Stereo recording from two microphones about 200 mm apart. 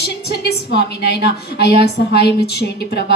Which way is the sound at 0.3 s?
55° left (ahead or behind).